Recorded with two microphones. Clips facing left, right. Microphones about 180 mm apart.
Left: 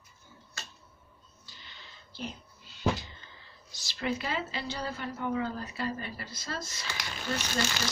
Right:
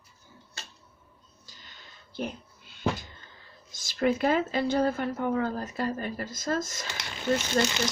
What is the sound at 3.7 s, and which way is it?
Speech, 50° right (ahead or behind).